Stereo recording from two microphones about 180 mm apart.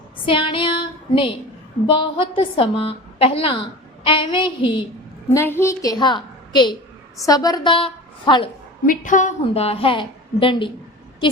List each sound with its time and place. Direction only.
0.3 s a woman's voice: 30° left (ahead or behind)
5.3 s a woman's voice: 15° left (ahead or behind)
8.9 s a woman's voice: 45° left (ahead or behind); by 10.7 s 25° left (ahead or behind)